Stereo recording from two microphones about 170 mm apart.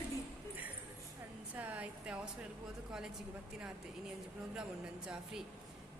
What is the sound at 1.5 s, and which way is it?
Speech, 10° right (ahead or behind).